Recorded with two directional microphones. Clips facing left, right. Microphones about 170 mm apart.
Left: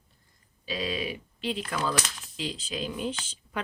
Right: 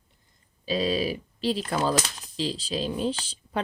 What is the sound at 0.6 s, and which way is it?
Speech, 30° right (ahead or behind).